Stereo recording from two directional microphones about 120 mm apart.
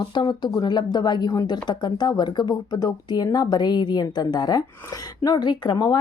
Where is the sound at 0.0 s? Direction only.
40° left (ahead or behind).